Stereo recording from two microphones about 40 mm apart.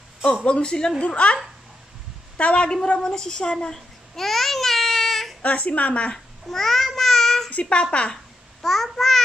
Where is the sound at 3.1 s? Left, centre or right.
Centre.